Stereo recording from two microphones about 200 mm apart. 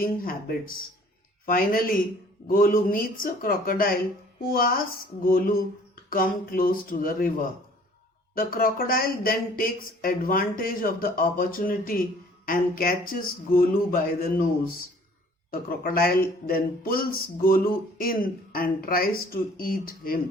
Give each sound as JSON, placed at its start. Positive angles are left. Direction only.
{"t": 0.0, "sound": "speech", "side_deg": 45}